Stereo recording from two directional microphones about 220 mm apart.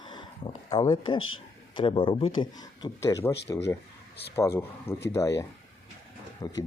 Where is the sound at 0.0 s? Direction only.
20° left (ahead or behind).